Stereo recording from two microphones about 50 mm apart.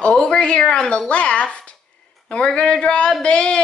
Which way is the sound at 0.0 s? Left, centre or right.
Left.